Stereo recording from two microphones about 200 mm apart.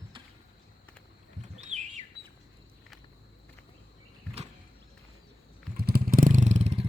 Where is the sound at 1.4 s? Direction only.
35° right (ahead or behind).